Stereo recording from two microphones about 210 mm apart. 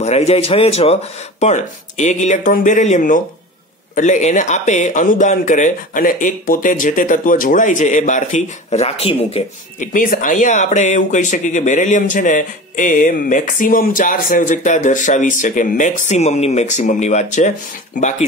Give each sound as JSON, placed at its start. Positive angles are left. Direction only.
{"t": 0.0, "sound": "a man's voice", "side_deg": 30}